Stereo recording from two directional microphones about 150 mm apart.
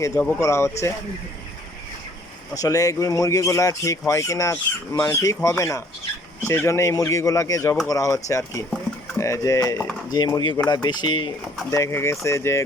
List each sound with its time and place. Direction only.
0.1 s speech: 10° left (ahead or behind)
2.6 s speech: 25° left (ahead or behind)
11.7 s speech: 20° left (ahead or behind)